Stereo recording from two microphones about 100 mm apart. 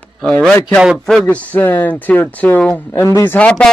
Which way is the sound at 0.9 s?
5° left (ahead or behind).